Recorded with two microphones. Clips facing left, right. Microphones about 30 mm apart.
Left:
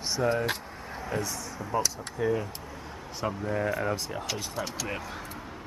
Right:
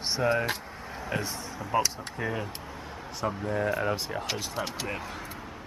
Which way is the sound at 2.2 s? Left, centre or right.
Right.